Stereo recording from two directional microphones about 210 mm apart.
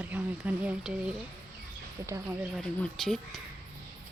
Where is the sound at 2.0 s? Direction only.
15° right (ahead or behind).